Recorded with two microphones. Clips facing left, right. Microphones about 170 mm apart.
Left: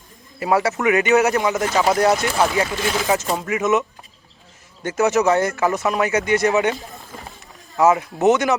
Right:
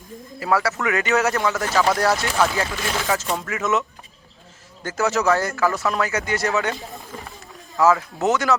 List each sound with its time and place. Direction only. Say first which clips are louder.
0.3 s speech: left 3 dB; 20° left (ahead or behind)
7.8 s speech: left 2 dB; 20° left (ahead or behind)